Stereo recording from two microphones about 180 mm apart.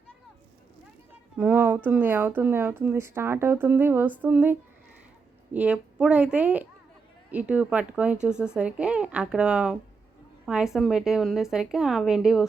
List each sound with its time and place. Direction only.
1.4 s speech: 10° right (ahead or behind)
5.5 s a woman's voice: 5° right (ahead or behind)